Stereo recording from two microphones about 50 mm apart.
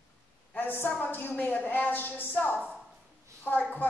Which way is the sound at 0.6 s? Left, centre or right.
Left.